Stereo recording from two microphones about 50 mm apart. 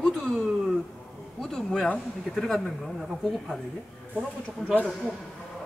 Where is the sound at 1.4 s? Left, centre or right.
Centre.